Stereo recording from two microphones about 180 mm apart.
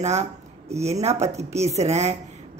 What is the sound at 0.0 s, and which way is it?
Speech, 40° right (ahead or behind).